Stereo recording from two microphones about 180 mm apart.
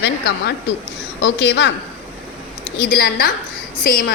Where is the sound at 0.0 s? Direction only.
75° left (ahead or behind).